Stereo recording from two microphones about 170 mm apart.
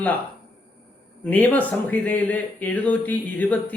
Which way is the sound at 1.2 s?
10° left (ahead or behind).